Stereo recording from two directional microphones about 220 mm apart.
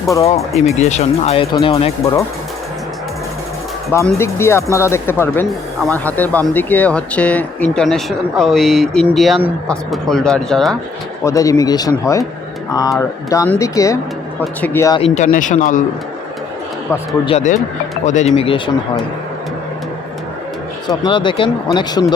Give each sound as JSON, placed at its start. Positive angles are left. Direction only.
{"t": 0.8, "sound": "speech", "side_deg": 30}
{"t": 3.9, "sound": "speech", "side_deg": 10}
{"t": 11.2, "sound": "speech", "side_deg": 15}
{"t": 15.0, "sound": "speech", "side_deg": 35}
{"t": 17.2, "sound": "speech", "side_deg": 30}
{"t": 20.8, "sound": "speech", "side_deg": 20}